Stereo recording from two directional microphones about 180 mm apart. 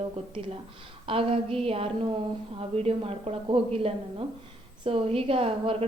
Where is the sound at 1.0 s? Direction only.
30° right (ahead or behind).